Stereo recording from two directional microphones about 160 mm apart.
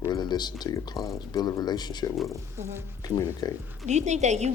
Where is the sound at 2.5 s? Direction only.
15° right (ahead or behind).